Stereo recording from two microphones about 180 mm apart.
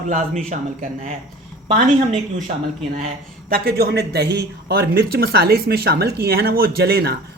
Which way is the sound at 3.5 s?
60° right (ahead or behind).